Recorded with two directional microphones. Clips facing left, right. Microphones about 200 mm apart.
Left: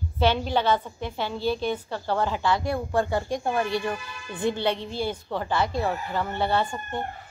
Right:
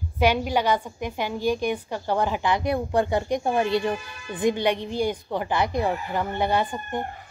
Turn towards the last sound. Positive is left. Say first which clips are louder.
# right 1 dB
turn(degrees=-15)  # may be behind; listen again after turning